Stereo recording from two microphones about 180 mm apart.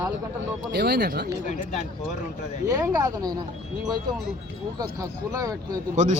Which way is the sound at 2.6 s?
20° right (ahead or behind).